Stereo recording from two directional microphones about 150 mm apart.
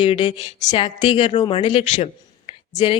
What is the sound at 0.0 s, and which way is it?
Speech, 40° left (ahead or behind).